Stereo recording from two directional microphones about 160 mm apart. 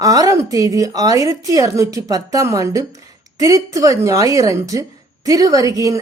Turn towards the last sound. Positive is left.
turn(degrees=-20)  # may be behind; listen again after turning